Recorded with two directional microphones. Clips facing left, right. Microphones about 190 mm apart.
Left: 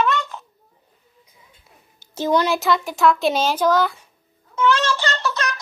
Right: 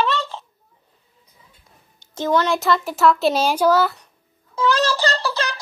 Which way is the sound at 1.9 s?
10° left (ahead or behind).